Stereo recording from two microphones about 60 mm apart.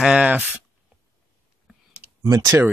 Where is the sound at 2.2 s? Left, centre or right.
Right.